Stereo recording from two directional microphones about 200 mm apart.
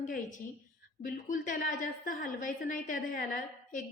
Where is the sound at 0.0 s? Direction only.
40° left (ahead or behind).